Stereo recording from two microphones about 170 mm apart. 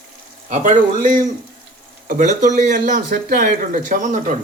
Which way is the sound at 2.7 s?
50° right (ahead or behind).